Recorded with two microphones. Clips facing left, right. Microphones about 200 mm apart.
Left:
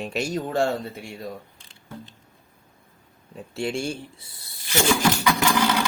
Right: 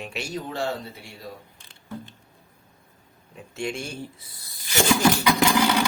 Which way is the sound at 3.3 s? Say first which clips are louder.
Left 3 dB; 35° left (ahead or behind).